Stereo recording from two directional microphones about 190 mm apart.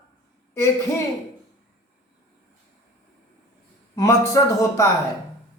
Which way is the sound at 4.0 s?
15° left (ahead or behind).